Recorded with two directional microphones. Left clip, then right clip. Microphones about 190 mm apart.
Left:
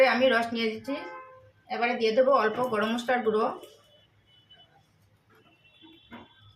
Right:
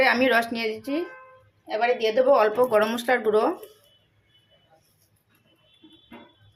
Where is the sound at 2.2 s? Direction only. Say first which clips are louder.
Right 5 dB; 55° right (ahead or behind).